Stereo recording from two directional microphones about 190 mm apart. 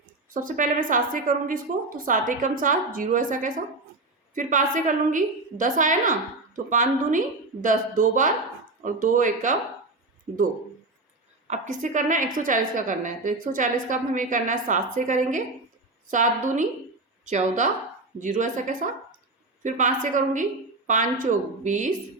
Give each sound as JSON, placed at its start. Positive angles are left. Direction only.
{"t": 0.3, "sound": "a woman's voice", "side_deg": -45}
{"t": 11.4, "sound": "a woman's voice", "side_deg": -40}